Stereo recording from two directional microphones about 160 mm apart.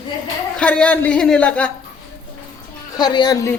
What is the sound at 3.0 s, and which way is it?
Speech, 25° left (ahead or behind).